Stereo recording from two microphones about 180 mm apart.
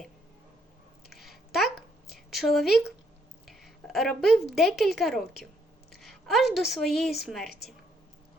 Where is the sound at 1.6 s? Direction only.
60° left (ahead or behind).